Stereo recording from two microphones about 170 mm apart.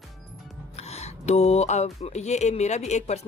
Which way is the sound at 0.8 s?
40° left (ahead or behind).